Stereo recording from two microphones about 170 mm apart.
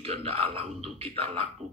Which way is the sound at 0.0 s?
35° right (ahead or behind).